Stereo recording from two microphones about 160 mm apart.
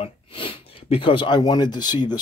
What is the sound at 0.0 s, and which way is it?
Speech, 35° left (ahead or behind).